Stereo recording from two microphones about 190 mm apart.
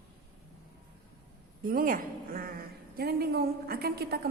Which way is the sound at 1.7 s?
50° right (ahead or behind).